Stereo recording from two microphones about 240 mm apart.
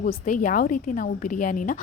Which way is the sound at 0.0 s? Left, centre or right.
Left.